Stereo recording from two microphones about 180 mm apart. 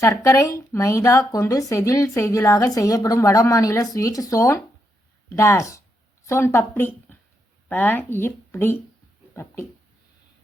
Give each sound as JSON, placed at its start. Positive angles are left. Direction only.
{"t": 0.0, "sound": "a woman's voice", "side_deg": 15}